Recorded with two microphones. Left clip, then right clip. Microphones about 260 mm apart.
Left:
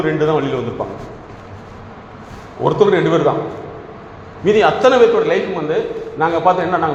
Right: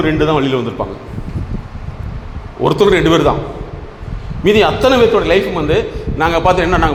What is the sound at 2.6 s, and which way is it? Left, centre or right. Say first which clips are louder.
Speech: right 2 dB; right.